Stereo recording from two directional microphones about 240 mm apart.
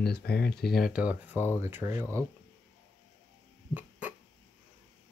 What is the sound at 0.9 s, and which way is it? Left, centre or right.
Speech, centre.